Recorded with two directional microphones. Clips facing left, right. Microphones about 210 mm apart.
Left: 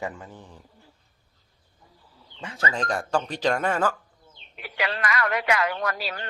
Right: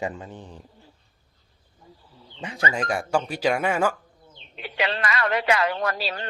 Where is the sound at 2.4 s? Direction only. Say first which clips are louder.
Right 2 dB; 15° right (ahead or behind).